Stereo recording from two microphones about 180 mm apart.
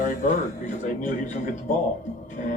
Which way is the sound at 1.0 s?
45° left (ahead or behind).